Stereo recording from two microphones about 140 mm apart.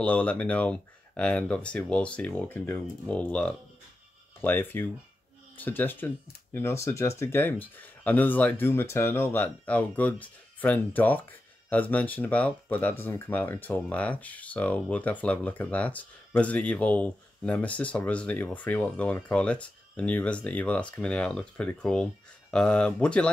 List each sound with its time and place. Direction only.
0.0 s speech: 10° left (ahead or behind)